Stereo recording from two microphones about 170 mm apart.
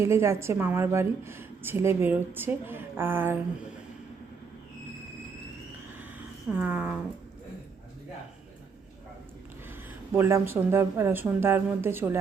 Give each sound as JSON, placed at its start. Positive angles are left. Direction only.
{"t": 0.0, "sound": "a woman's voice", "side_deg": -15}
{"t": 6.5, "sound": "a woman's voice", "side_deg": -10}
{"t": 10.2, "sound": "a woman's voice", "side_deg": -15}